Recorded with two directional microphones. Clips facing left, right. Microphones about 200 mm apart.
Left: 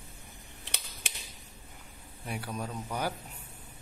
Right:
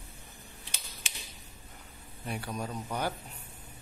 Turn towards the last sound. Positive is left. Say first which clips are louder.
# even
turn(degrees=10)  # may be behind; listen again after turning